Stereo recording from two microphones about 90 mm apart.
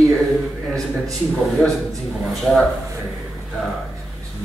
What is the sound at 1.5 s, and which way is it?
Speech, 5° left (ahead or behind).